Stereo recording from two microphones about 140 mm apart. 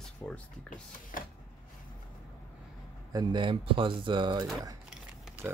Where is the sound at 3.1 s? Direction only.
35° right (ahead or behind).